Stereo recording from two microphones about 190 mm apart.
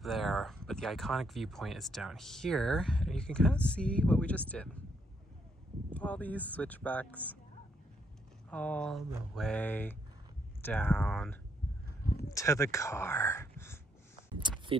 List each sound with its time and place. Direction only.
0.0 s speech: centre (ahead or behind)
5.9 s speech: 10° left (ahead or behind)
8.5 s speech: 5° left (ahead or behind)
12.3 s speech: 15° left (ahead or behind)
14.7 s speech: 30° right (ahead or behind)